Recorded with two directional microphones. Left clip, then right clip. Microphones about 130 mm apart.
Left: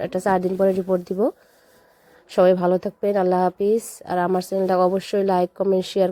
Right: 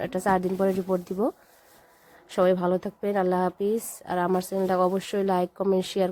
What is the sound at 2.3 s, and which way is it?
A woman's voice, 30° left (ahead or behind).